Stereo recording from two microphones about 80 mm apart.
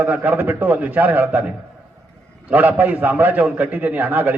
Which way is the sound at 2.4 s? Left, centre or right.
Right.